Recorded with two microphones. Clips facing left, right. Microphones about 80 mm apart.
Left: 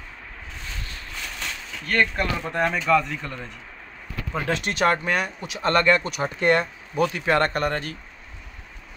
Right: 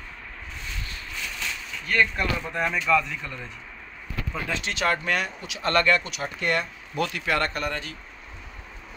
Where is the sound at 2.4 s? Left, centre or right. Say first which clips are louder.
Left 4 dB; left.